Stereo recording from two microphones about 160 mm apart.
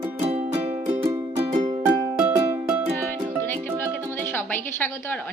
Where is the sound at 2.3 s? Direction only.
20° right (ahead or behind).